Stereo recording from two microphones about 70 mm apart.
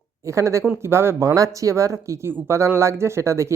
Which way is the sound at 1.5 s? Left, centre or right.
Right.